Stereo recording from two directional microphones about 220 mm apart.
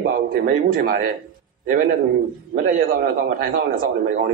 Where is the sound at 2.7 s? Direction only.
40° right (ahead or behind).